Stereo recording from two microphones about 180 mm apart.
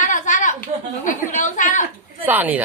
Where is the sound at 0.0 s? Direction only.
45° left (ahead or behind).